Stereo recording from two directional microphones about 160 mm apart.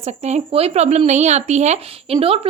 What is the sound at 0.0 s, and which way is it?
A woman's voice, 45° right (ahead or behind).